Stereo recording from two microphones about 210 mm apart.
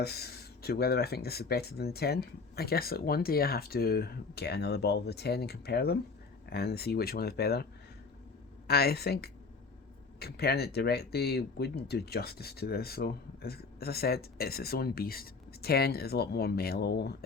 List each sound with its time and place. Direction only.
0.0 s speech: 50° left (ahead or behind)